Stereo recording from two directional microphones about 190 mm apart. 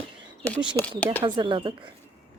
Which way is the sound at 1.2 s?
25° right (ahead or behind).